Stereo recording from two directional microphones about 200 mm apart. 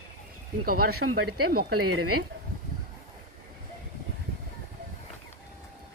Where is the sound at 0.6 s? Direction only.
50° right (ahead or behind).